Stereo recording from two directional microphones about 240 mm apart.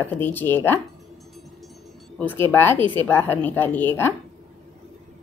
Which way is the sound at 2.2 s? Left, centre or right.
Centre.